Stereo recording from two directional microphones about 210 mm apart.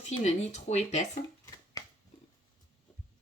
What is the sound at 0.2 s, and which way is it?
Speech, 35° left (ahead or behind).